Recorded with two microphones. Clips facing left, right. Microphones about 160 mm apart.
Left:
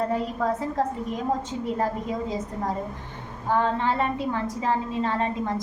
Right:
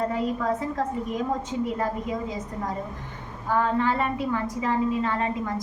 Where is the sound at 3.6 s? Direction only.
30° left (ahead or behind).